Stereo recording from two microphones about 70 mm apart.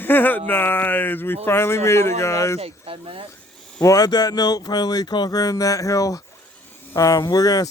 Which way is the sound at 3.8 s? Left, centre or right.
Left.